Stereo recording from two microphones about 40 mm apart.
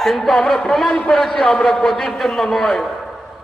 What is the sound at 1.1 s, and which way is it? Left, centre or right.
A man's voice, centre.